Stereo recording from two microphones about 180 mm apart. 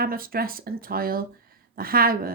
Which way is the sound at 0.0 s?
55° right (ahead or behind).